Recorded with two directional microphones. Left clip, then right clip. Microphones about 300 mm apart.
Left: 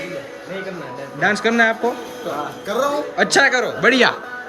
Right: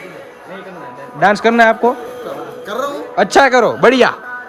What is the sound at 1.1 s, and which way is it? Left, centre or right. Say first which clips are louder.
Speech: right 6 dB; centre.